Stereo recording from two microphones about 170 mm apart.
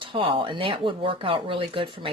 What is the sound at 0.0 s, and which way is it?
Speech, 30° right (ahead or behind).